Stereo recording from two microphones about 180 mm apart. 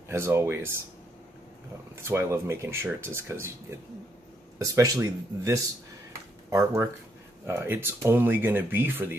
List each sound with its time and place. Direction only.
0.1 s speech: 15° right (ahead or behind)
2.0 s speech: 15° right (ahead or behind)
4.6 s speech: 15° right (ahead or behind)